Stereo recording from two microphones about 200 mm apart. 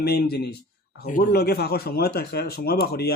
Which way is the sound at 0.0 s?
55° left (ahead or behind).